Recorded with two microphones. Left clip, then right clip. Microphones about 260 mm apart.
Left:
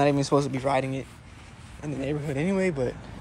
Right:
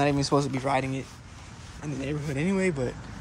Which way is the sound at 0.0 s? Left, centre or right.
Centre.